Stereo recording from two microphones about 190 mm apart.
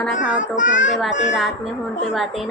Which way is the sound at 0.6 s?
40° left (ahead or behind).